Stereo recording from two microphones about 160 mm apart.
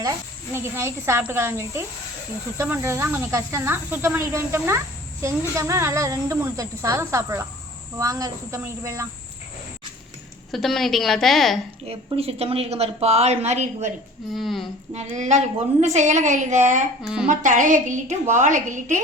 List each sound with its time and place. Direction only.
0.5 s snake: 15° right (ahead or behind)
5.2 s speech: 20° right (ahead or behind)
10.5 s a woman's voice: centre (ahead or behind)
11.9 s a woman's voice: 40° right (ahead or behind)
14.3 s a woman's voice: centre (ahead or behind)
14.9 s a woman's voice: 45° right (ahead or behind)